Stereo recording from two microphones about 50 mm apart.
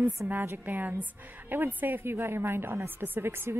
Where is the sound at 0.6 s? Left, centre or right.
Right.